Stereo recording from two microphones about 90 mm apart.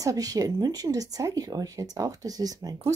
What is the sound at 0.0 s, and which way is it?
Speech, 45° right (ahead or behind).